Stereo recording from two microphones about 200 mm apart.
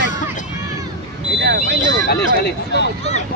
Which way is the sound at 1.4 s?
55° right (ahead or behind).